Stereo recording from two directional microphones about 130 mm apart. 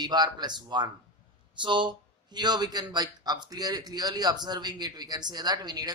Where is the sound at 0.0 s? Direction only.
35° right (ahead or behind).